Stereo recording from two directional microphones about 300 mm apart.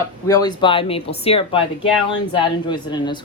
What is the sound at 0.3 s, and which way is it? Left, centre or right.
A woman's voice, centre.